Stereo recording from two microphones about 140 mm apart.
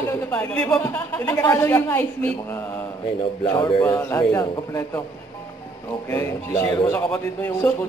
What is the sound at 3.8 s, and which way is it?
A man's voice, 20° left (ahead or behind).